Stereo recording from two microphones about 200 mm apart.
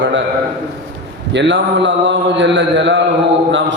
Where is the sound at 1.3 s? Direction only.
65° right (ahead or behind).